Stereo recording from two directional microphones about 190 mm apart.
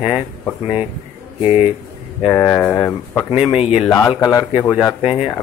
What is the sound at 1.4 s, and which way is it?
Speech, 30° left (ahead or behind).